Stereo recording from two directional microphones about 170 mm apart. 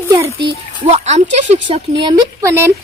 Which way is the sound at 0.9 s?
40° right (ahead or behind).